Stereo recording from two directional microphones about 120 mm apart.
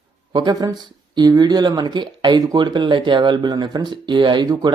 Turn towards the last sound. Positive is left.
turn(degrees=-35)  # may be behind; listen again after turning